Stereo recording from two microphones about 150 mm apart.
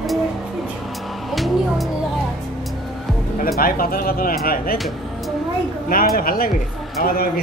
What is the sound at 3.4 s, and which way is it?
Speech, 85° left.